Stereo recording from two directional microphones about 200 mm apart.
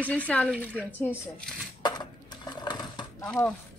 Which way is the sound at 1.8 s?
20° left (ahead or behind).